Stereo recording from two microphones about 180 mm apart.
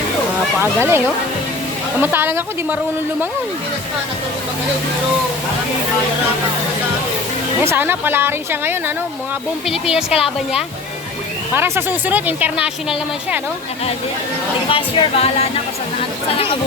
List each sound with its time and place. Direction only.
0.6 s a woman's voice: 15° right (ahead or behind)
7.6 s a woman's voice: 15° right (ahead or behind)
9.6 s speech: centre (ahead or behind)
11.5 s a woman's voice: 10° right (ahead or behind)
14.7 s speech: 30° left (ahead or behind)